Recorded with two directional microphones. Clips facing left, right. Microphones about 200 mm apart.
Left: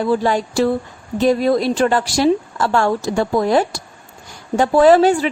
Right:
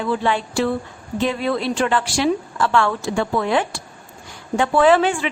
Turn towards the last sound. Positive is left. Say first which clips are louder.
# left 4 dB
turn(degrees=40)  # may be behind; listen again after turning